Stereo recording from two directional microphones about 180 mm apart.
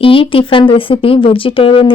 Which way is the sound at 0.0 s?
30° left (ahead or behind).